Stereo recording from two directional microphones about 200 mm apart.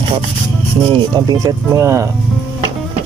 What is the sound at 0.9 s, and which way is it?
Speech, 20° right (ahead or behind).